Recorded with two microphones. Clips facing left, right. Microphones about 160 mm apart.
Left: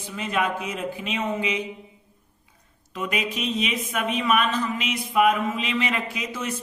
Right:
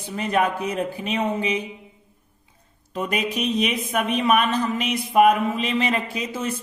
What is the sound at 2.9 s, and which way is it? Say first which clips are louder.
Mantra: right 3 dB; 40° right (ahead or behind).